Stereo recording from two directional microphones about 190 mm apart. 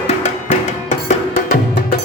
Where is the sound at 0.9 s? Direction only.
40° left (ahead or behind).